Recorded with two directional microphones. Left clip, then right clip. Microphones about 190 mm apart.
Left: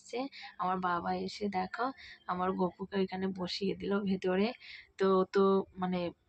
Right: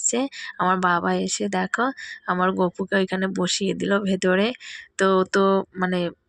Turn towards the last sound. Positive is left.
turn(degrees=-25)  # may be behind; listen again after turning